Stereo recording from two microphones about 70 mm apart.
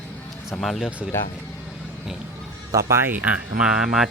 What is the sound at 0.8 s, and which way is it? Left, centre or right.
Speech, centre.